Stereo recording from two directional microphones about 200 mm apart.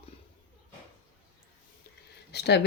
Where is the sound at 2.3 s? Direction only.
55° left (ahead or behind).